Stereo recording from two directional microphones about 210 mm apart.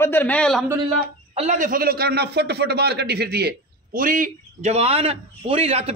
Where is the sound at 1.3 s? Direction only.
35° right (ahead or behind).